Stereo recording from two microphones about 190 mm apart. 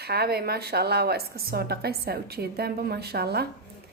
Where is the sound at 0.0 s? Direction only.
55° right (ahead or behind).